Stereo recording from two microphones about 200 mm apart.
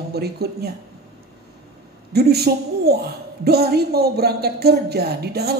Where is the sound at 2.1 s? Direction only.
50° right (ahead or behind).